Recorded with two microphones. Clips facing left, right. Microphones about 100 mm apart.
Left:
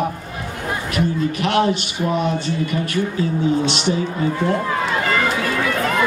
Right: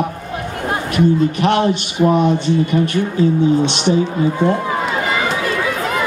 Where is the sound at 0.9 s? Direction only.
20° right (ahead or behind).